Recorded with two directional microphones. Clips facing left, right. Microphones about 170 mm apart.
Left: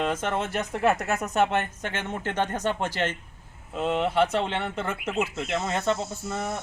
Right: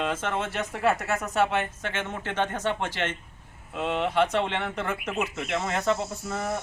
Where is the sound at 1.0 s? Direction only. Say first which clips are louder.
Left 1 dB; 20° left (ahead or behind).